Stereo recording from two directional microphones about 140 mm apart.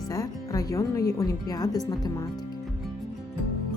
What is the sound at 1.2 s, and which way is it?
Speech, 25° left (ahead or behind).